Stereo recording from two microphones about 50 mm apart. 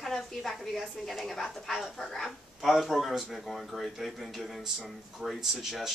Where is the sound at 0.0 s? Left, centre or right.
Centre.